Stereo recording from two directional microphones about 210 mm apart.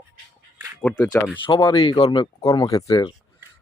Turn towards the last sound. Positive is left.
turn(degrees=15)  # may be behind; listen again after turning